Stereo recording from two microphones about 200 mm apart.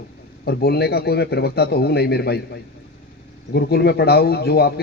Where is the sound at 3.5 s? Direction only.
50° left (ahead or behind).